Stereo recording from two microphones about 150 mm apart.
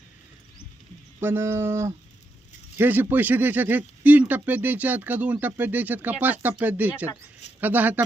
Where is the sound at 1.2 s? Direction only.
15° right (ahead or behind).